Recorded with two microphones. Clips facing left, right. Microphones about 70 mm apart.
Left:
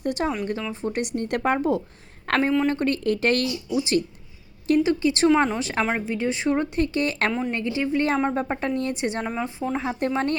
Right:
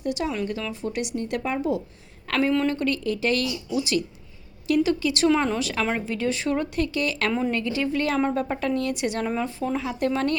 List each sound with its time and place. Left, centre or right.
0.0 s a woman's voice: left
3.0 s speech: left
3.7 s speech: left
9.2 s a woman's voice: centre
9.7 s speech: left